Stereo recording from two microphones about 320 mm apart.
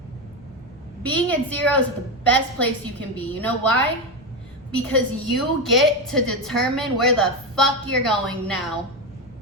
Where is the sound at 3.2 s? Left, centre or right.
Centre.